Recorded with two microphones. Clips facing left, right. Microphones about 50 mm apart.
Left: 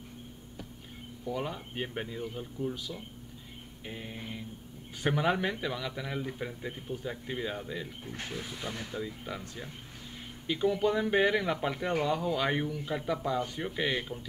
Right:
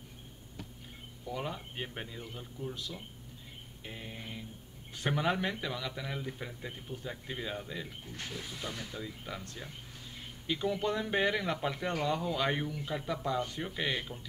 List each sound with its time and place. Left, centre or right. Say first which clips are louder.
1.2 s speech: left 3 dB; centre
3.8 s mantra: left 3 dB; centre
5.0 s speech: left 3 dB; centre
8.4 s speech: left 1 dB; left
9.0 s speech: left 3 dB; centre